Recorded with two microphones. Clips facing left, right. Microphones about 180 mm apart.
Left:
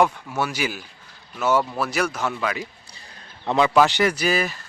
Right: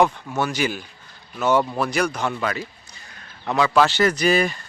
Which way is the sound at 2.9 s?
30° left (ahead or behind).